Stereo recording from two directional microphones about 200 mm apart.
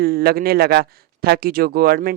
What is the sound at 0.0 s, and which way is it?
Speech, 50° right (ahead or behind).